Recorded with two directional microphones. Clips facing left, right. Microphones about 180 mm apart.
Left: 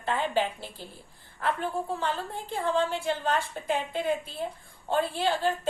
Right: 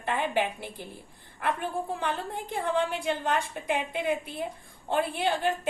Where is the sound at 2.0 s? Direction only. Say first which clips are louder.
Even; 15° right (ahead or behind).